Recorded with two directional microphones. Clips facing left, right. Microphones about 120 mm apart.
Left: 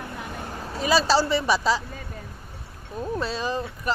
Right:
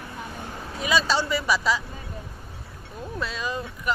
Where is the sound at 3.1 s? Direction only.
30° left (ahead or behind).